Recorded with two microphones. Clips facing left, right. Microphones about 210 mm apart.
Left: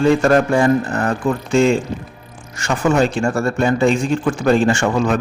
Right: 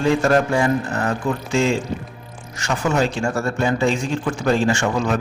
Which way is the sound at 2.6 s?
55° left (ahead or behind).